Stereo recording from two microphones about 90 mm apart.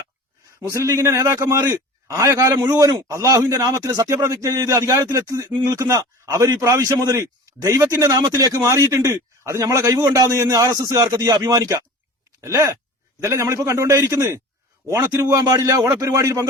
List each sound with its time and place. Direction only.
0.7 s a man's voice: 35° right (ahead or behind)
3.0 s a man's voice: 30° right (ahead or behind)
12.4 s a sound: 35° right (ahead or behind)
13.2 s a man's voice: 35° right (ahead or behind)